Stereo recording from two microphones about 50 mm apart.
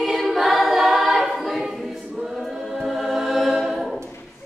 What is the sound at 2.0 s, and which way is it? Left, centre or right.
Choir, centre.